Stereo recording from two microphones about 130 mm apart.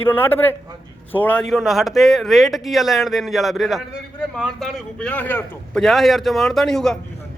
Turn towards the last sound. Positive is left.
turn(degrees=5)  # may be behind; listen again after turning